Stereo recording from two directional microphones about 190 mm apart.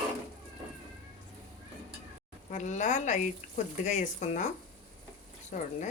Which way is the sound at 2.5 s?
40° left (ahead or behind).